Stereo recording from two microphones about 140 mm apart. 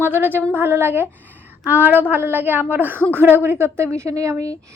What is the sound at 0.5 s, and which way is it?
A woman's voice, 15° right (ahead or behind).